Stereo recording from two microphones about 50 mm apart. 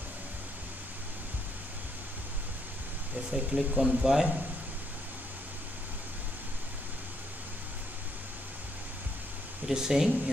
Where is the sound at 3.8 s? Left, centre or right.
Centre.